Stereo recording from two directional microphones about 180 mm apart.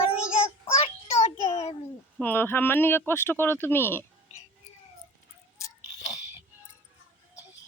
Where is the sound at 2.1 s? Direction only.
10° left (ahead or behind).